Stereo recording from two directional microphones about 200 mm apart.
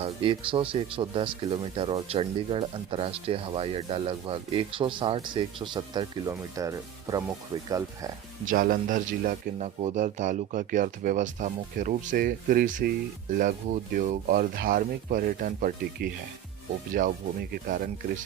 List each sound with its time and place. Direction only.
0.0 s speech: 25° right (ahead or behind)
8.4 s a man's voice: 45° right (ahead or behind)
17.5 s speech: 45° right (ahead or behind)